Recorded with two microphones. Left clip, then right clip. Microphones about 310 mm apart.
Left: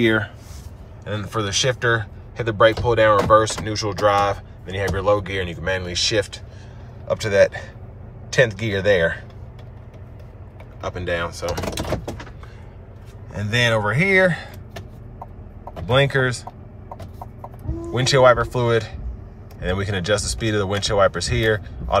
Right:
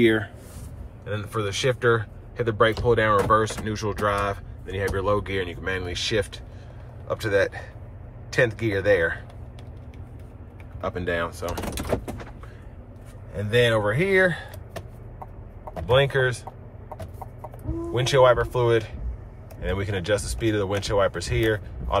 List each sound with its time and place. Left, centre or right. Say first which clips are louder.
1.0 s speech: left 3 dB; centre
10.8 s speech: left 2 dB; centre
13.3 s speech: left 1 dB; centre
15.9 s speech: left 2 dB; centre
17.9 s speech: left 4 dB; centre